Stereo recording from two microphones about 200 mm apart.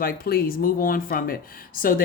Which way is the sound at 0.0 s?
50° left (ahead or behind).